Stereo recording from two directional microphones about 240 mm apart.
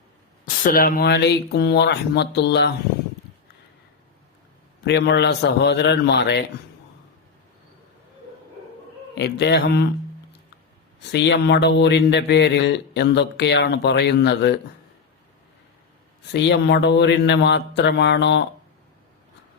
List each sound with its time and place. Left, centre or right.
0.4 s speech: left
4.9 s speech: left
9.1 s speech: left
11.1 s speech: left
16.3 s speech: left